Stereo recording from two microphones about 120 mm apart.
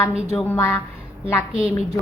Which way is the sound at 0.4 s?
20° left (ahead or behind).